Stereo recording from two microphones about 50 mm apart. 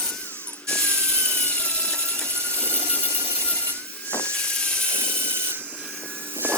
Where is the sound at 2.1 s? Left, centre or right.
Left.